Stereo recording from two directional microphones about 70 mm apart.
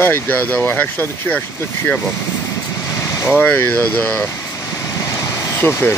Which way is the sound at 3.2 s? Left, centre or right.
Left.